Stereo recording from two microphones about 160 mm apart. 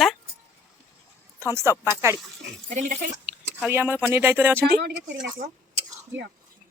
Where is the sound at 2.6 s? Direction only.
50° right (ahead or behind).